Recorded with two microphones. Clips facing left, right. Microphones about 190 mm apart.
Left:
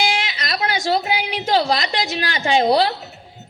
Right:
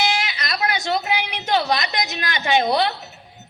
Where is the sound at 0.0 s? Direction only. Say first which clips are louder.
Left 1 dB; 30° left (ahead or behind).